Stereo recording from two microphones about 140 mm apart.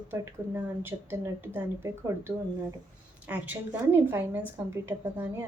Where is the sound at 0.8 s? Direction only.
15° right (ahead or behind).